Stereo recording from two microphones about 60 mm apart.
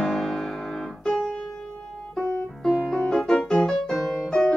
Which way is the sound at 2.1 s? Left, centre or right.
Centre.